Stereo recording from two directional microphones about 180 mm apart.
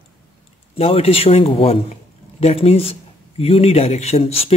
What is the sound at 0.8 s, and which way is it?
Speech, 35° left (ahead or behind).